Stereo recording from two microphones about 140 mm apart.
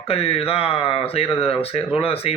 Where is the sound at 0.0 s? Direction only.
45° left (ahead or behind).